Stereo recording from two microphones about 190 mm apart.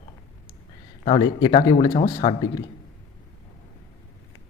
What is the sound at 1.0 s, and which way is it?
Speech, 25° left (ahead or behind).